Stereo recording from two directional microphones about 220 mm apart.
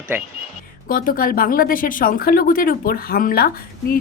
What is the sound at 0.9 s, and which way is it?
Speech, 40° left (ahead or behind).